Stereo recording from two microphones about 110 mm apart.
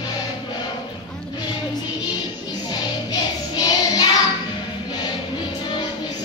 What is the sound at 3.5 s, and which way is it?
Music, 35° left (ahead or behind).